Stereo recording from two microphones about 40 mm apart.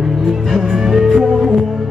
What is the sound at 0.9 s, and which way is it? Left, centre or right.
Music, centre.